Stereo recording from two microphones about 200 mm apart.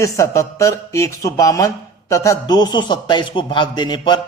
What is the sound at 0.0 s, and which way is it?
A man's voice, 15° left (ahead or behind).